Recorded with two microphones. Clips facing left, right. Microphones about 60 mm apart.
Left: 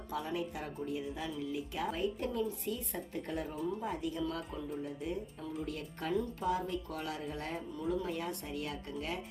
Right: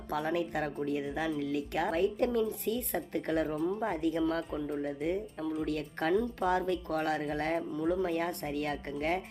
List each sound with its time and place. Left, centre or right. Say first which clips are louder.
0.1 s speech: right 6 dB; right
5.6 s speech: right 7 dB; right